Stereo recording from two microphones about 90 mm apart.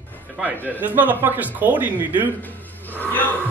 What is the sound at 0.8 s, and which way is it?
A man's voice, 20° right (ahead or behind).